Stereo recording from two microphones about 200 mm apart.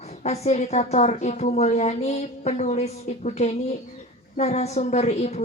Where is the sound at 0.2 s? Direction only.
35° left (ahead or behind).